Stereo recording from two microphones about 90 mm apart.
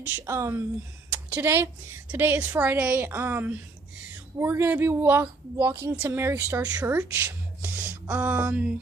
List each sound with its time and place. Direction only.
0.0 s a woman's voice: 30° right (ahead or behind)
5.7 s a woman's voice: 35° right (ahead or behind); by 8.7 s 15° right (ahead or behind)